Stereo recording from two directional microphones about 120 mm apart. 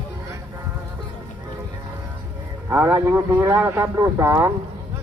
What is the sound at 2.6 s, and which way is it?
Speech, 20° right (ahead or behind).